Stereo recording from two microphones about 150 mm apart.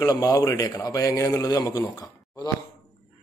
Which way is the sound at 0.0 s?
25° left (ahead or behind).